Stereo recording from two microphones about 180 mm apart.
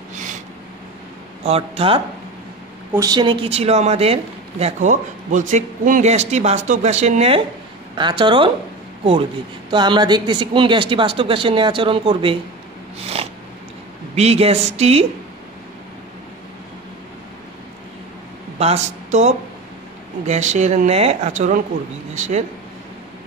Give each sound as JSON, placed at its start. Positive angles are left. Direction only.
{"t": 0.1, "sound": "a sound", "side_deg": -45}
{"t": 1.4, "sound": "speech", "side_deg": -35}
{"t": 2.9, "sound": "a woman's voice", "side_deg": -20}
{"t": 9.7, "sound": "a woman's voice", "side_deg": -25}
{"t": 14.1, "sound": "speech", "side_deg": -35}
{"t": 18.6, "sound": "speech", "side_deg": -40}